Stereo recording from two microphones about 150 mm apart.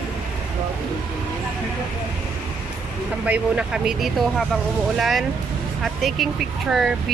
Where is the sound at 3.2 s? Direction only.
10° right (ahead or behind).